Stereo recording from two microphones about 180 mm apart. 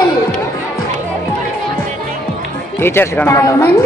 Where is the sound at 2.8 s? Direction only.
10° left (ahead or behind).